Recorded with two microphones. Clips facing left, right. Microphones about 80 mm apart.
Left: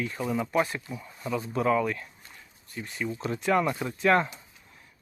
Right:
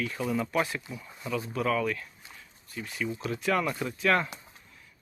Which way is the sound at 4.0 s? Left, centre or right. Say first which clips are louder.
Left 3 dB; left.